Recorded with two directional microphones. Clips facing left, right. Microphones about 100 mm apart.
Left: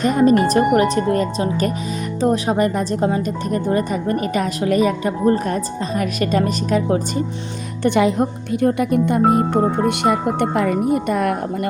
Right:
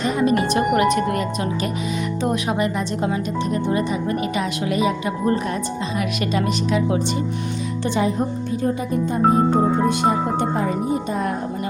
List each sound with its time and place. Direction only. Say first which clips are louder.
0.0 s speech: left 5 dB; 45° left (ahead or behind)
5.2 s speech: left 4 dB; 35° left (ahead or behind)
7.9 s speech: left 6 dB; 70° left (ahead or behind)